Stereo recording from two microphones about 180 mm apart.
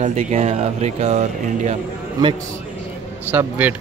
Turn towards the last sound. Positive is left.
turn(degrees=-10)  # may be behind; listen again after turning